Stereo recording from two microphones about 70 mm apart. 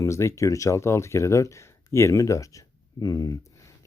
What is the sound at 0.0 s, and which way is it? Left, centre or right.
Speech, left.